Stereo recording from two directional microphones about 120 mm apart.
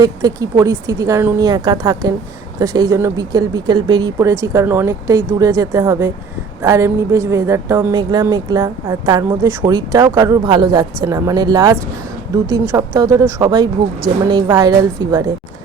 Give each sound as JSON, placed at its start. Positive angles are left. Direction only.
{"t": 0.0, "sound": "a woman's voice", "side_deg": -30}